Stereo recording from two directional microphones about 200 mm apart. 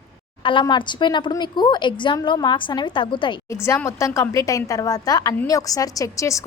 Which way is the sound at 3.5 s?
15° left (ahead or behind).